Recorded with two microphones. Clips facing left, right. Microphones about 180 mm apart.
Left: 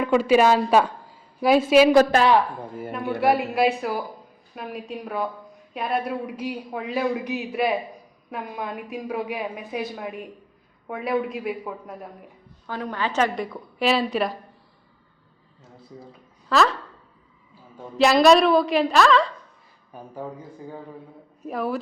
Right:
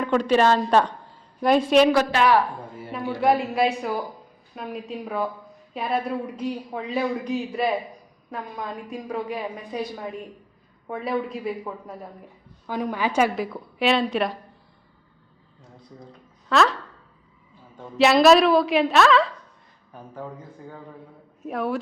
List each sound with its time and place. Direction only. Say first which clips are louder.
0.0 s a woman's voice: left 2 dB; 10° left (ahead or behind)
3.2 s a woman's voice: even; centre (ahead or behind)
12.6 s a woman's voice: right 2 dB; 10° right (ahead or behind)
16.5 s speech: even; centre (ahead or behind)
17.7 s a woman's voice: even; centre (ahead or behind)
19.9 s speech: left 2 dB; 10° left (ahead or behind)
21.4 s a woman's voice: even; centre (ahead or behind)